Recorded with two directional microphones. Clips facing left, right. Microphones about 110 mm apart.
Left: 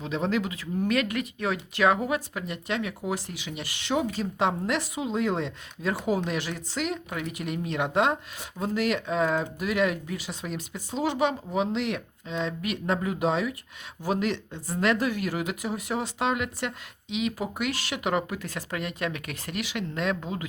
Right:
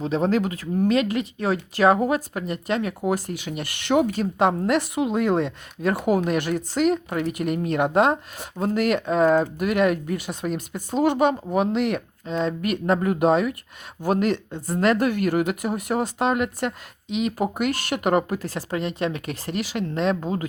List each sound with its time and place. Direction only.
0.0 s speech: 40° right (ahead or behind)
0.9 s speech: 25° right (ahead or behind)